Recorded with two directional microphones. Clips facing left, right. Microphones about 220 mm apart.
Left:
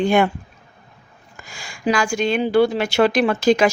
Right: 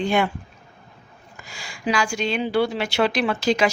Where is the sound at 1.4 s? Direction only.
50° left (ahead or behind).